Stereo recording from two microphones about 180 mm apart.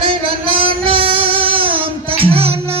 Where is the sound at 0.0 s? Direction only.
30° right (ahead or behind).